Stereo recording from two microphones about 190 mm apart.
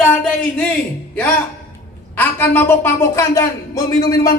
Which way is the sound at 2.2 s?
10° left (ahead or behind).